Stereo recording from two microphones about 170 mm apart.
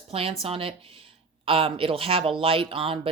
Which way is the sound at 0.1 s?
35° right (ahead or behind).